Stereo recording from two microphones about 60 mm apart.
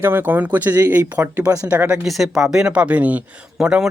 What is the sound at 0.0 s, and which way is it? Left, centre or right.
Speech, right.